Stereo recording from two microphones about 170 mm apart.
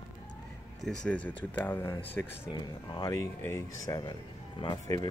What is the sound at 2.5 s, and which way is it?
Speech, 25° left (ahead or behind).